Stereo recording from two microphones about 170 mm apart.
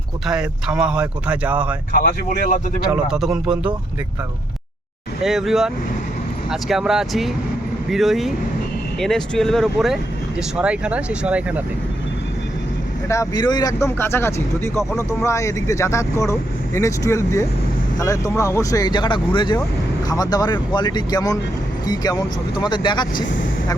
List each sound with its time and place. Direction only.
0.3 s speech: 5° right (ahead or behind)
1.9 s speech: 55° left (ahead or behind)
2.8 s speech: 5° right (ahead or behind)
5.2 s speech: centre (ahead or behind)
13.1 s speech: 20° left (ahead or behind)